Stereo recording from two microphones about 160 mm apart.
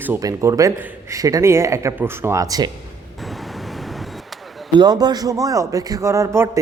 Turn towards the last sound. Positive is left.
turn(degrees=-20)  # may be behind; listen again after turning